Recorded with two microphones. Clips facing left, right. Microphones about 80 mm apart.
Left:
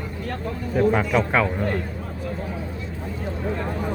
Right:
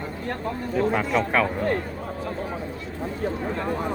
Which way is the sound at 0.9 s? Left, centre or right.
Centre.